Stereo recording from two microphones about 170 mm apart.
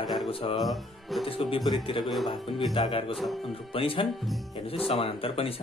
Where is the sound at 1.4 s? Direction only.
30° left (ahead or behind).